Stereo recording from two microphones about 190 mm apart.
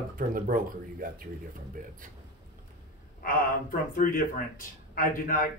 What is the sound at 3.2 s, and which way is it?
Speech, 45° left (ahead or behind).